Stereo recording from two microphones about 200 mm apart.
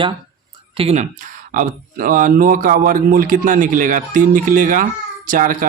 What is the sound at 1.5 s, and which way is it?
Speech, 40° right (ahead or behind).